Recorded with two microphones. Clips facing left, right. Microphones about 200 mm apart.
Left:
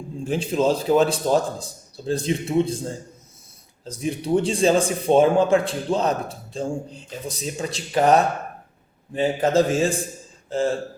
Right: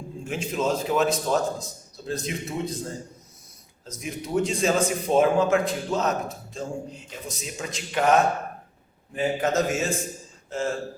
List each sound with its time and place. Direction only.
0.3 s speech: 30° left (ahead or behind)